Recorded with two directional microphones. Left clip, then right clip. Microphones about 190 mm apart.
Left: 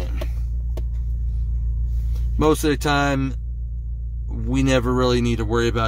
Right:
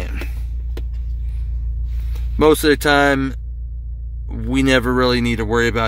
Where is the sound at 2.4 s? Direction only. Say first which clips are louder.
Right 6 dB; 15° right (ahead or behind).